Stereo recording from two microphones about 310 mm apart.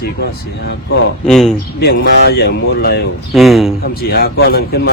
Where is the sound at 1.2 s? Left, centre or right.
Centre.